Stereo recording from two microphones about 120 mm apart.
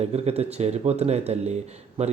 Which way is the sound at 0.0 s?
60° right (ahead or behind).